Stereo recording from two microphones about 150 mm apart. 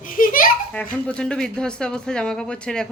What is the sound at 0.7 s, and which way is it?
Speech, 5° left (ahead or behind).